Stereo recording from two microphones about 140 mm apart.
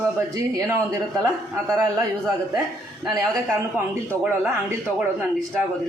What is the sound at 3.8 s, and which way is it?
Speech, 15° right (ahead or behind).